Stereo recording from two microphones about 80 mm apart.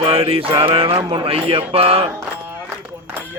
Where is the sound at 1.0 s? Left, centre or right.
Right.